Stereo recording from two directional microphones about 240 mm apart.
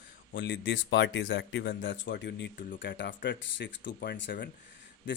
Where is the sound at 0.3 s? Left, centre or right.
Left.